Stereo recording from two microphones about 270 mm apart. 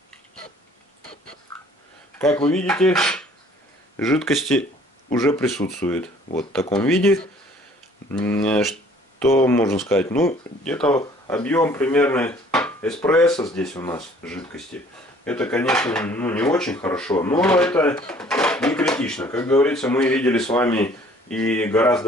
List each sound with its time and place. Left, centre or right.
2.1 s speech: centre